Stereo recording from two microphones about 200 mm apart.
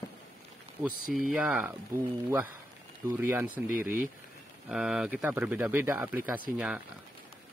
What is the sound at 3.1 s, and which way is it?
Speech, 10° right (ahead or behind).